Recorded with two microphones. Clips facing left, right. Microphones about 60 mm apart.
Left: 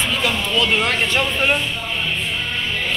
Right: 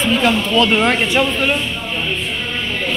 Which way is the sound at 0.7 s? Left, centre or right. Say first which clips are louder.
Right 4 dB; right.